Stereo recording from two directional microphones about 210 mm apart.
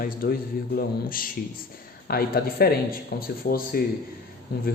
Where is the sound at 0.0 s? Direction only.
45° left (ahead or behind).